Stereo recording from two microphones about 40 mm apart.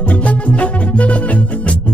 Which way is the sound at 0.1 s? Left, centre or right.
Left.